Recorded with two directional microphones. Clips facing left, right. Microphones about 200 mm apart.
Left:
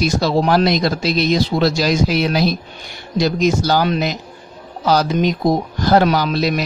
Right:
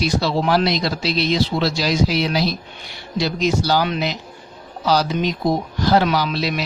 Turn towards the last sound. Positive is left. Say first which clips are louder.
# left 4 dB
turn(degrees=45)  # may be behind; listen again after turning